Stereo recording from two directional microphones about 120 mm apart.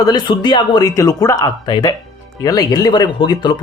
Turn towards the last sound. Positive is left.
turn(degrees=35)  # may be behind; listen again after turning